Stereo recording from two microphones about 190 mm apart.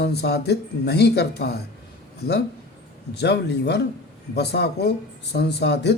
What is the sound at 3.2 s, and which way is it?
A man's voice, 65° left (ahead or behind).